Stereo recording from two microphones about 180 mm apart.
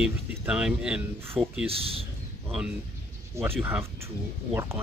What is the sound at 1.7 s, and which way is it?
Speech, 30° right (ahead or behind).